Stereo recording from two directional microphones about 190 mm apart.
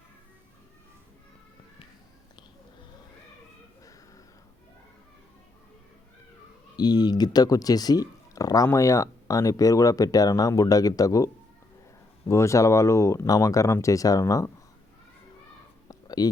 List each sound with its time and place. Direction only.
6.7 s speech: 20° left (ahead or behind)
12.3 s speech: 15° left (ahead or behind)
15.9 s a sound: 20° left (ahead or behind)